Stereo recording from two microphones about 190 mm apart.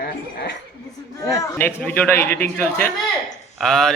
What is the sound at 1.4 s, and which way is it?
A man's voice, 10° left (ahead or behind).